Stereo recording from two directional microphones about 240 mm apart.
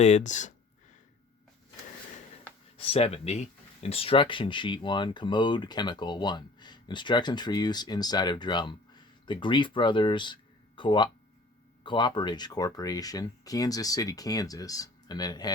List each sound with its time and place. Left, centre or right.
0.0 s speech: left
2.7 s speech: left